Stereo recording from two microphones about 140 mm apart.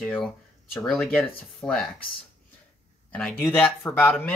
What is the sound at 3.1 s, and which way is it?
Speech, 10° left (ahead or behind).